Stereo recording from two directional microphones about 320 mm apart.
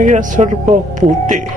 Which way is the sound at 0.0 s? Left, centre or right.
Right.